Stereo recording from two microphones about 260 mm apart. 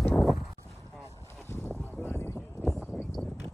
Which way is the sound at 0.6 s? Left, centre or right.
Centre.